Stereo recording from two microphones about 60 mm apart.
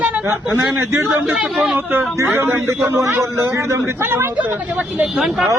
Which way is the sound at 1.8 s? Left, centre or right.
Right.